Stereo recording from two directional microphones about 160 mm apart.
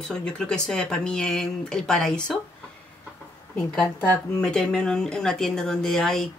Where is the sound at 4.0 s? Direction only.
5° left (ahead or behind).